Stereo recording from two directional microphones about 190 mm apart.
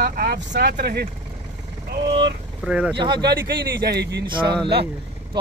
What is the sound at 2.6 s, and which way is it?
Speech, 5° right (ahead or behind).